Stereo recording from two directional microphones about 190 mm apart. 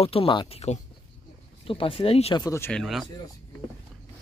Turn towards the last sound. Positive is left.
turn(degrees=0)  # may be behind; listen again after turning